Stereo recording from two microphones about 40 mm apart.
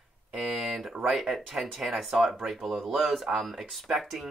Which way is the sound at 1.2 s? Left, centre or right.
Centre.